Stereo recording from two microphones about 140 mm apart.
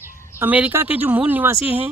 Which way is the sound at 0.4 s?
10° right (ahead or behind).